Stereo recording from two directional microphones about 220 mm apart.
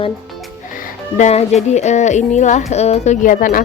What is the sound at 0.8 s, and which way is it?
Music, 30° left (ahead or behind).